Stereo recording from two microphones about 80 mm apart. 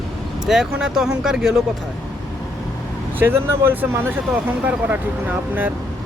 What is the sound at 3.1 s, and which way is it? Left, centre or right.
Speech, right.